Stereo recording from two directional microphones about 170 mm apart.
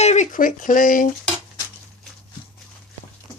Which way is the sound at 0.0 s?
45° left (ahead or behind).